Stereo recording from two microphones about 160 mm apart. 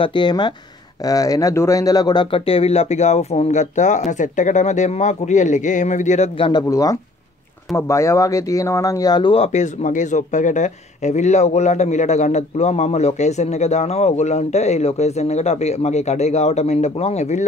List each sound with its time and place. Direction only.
0.0 s speech: 30° left (ahead or behind)
6.7 s speech: 20° left (ahead or behind); by 17.5 s 45° left (ahead or behind)